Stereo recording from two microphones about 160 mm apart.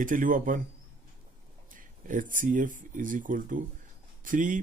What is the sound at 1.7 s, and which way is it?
Speech, 55° right (ahead or behind).